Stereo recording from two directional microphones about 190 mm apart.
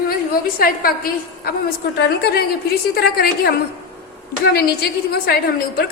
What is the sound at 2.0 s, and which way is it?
A woman's voice, 60° left (ahead or behind).